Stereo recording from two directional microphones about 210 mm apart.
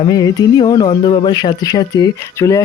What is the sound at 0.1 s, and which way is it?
Speech, 15° left (ahead or behind).